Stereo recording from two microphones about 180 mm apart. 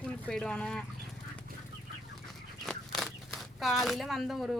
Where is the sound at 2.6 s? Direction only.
Centre (ahead or behind).